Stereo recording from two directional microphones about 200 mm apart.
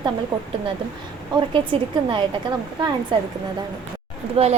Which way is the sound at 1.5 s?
25° right (ahead or behind).